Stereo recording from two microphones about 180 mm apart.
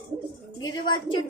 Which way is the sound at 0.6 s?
25° left (ahead or behind).